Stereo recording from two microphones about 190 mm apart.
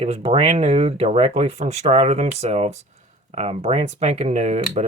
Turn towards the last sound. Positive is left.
turn(degrees=-35)  # may be behind; listen again after turning